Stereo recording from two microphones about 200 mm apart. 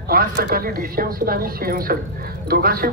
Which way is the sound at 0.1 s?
45° right (ahead or behind).